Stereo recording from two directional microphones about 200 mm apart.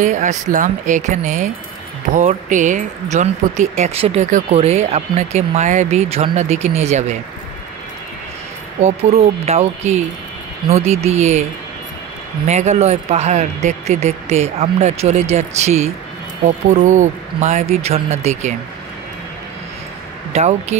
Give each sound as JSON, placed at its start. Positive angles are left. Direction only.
{"t": 0.0, "sound": "speech", "side_deg": -40}
{"t": 8.8, "sound": "speech", "side_deg": -30}
{"t": 12.4, "sound": "speech", "side_deg": -35}
{"t": 20.3, "sound": "speech", "side_deg": -35}